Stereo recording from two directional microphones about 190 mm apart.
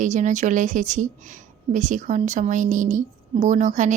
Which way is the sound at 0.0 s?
40° right (ahead or behind).